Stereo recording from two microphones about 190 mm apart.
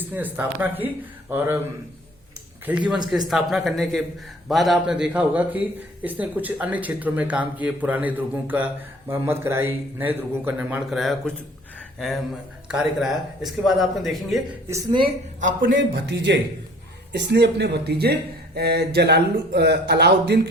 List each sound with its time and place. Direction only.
0.1 s a man's voice: 10° right (ahead or behind)
2.6 s a man's voice: 5° right (ahead or behind)
14.7 s a man's voice: 15° right (ahead or behind)
15.4 s a man's voice: 40° right (ahead or behind)
15.7 s speech: 65° right (ahead or behind)